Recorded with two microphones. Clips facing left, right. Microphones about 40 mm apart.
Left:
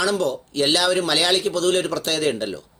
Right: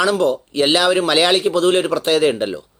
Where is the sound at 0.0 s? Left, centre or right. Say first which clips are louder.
Right 5 dB; right.